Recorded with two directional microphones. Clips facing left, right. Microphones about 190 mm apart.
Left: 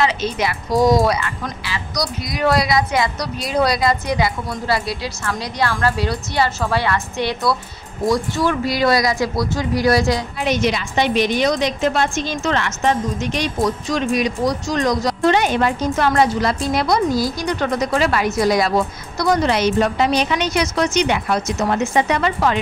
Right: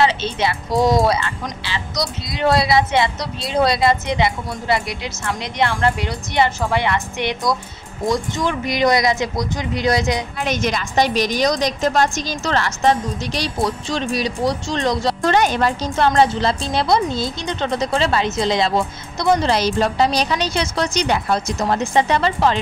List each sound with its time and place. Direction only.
0.0 s speech: 30° right (ahead or behind)
10.4 s a woman's voice: 45° right (ahead or behind); by 22.6 s 30° right (ahead or behind)